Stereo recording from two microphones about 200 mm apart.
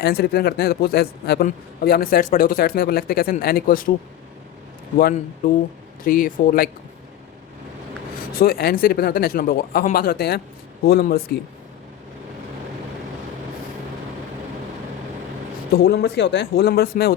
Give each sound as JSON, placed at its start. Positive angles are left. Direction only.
{"t": 0.0, "sound": "a man's voice", "side_deg": 50}
{"t": 4.9, "sound": "a man's voice", "side_deg": 45}
{"t": 8.3, "sound": "a man's voice", "side_deg": 50}
{"t": 15.7, "sound": "a man's voice", "side_deg": 50}